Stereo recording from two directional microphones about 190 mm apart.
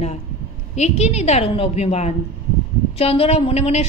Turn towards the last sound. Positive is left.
turn(degrees=35)  # may be behind; listen again after turning